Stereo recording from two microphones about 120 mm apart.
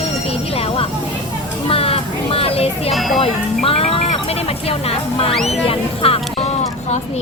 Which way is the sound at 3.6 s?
55° left (ahead or behind).